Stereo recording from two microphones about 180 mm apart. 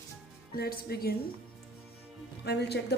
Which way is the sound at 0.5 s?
60° left (ahead or behind).